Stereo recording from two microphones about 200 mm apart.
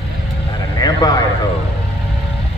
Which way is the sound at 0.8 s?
20° left (ahead or behind).